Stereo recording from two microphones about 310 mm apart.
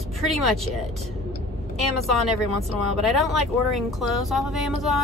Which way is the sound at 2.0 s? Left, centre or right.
Centre.